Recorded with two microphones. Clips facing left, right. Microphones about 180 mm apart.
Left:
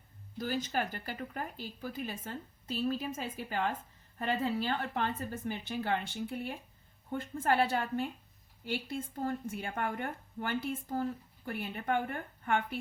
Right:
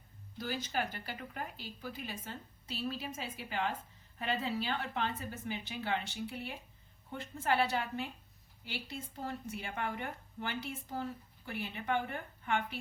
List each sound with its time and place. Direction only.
0.3 s speech: 45° left (ahead or behind)